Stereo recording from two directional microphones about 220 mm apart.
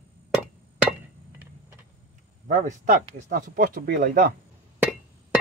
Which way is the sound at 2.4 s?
35° right (ahead or behind).